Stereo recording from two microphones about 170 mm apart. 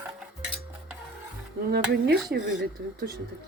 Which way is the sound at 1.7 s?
70° right (ahead or behind).